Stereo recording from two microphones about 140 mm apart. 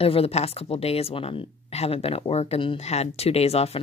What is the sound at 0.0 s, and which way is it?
Speech, 45° left (ahead or behind).